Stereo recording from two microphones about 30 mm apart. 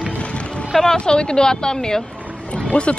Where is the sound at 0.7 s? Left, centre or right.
Centre.